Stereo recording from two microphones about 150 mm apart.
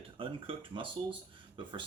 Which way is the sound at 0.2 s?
35° right (ahead or behind).